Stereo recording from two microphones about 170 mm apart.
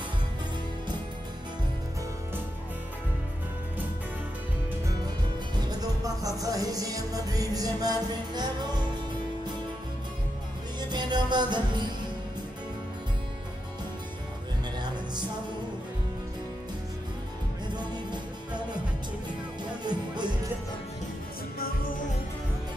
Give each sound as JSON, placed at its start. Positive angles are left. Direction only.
{"t": 5.6, "sound": "music", "side_deg": -25}
{"t": 10.9, "sound": "music", "side_deg": -25}
{"t": 17.7, "sound": "music", "side_deg": -25}
{"t": 19.8, "sound": "music", "side_deg": -25}
{"t": 21.5, "sound": "music", "side_deg": 60}